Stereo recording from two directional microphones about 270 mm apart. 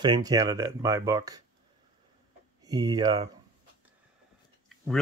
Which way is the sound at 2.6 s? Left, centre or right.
Centre.